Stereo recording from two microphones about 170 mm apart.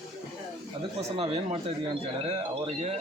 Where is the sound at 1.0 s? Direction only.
35° right (ahead or behind).